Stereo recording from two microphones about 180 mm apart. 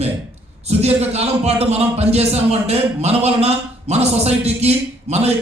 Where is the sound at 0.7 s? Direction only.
35° right (ahead or behind).